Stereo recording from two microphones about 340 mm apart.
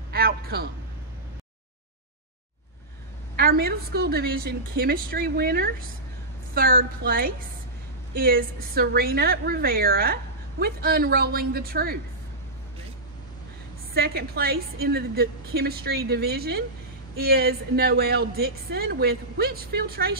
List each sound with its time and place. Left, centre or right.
0.1 s a sound: right
3.3 s a woman's voice: right
13.9 s a woman's voice: right